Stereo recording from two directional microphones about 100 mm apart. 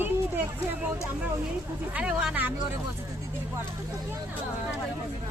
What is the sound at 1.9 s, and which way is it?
Speech, 10° right (ahead or behind).